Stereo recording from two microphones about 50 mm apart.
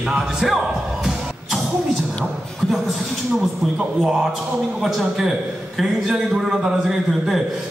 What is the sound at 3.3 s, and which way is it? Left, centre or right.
A man's voice, centre.